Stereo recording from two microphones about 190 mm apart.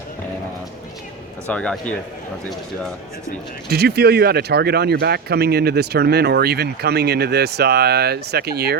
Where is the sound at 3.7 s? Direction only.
55° right (ahead or behind).